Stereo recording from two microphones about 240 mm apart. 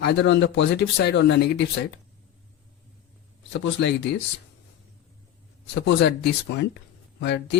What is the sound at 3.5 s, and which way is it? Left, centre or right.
Speech, left.